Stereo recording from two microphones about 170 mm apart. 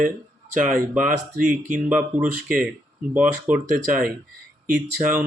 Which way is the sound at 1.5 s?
10° right (ahead or behind).